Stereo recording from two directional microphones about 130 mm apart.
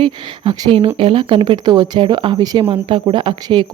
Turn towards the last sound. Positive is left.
turn(degrees=-40)  # may be behind; listen again after turning